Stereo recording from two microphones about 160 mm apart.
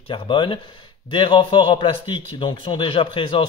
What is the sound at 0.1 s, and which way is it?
A man's voice, 30° left (ahead or behind).